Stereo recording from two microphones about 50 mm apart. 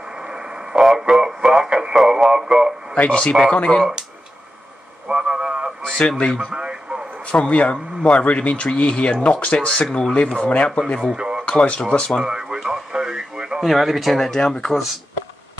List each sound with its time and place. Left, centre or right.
0.1 s radio: centre
1.0 s speech: centre
3.0 s speech: left
5.0 s radio: centre
5.9 s speech: centre
6.5 s radio: centre
7.2 s speech: left
11.1 s a sound: centre
11.4 s speech: left
12.2 s a sound: centre
12.5 s radio: centre
13.7 s speech: centre